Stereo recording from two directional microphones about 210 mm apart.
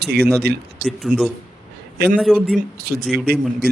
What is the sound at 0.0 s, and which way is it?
Speech, 50° right (ahead or behind).